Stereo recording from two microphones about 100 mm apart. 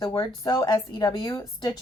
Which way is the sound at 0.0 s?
50° left (ahead or behind).